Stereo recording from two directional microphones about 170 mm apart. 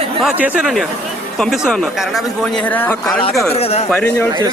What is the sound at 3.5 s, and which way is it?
Speech, 35° left (ahead or behind).